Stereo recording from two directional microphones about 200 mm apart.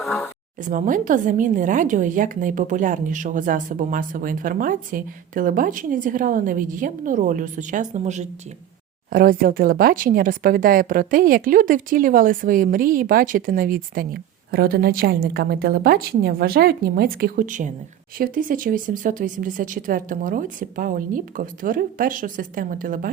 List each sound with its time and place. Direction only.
0.6 s speech: 40° right (ahead or behind)
9.0 s speech: 45° right (ahead or behind)